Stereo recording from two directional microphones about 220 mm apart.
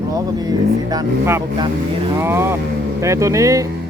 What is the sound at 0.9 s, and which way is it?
A man's voice, 15° right (ahead or behind).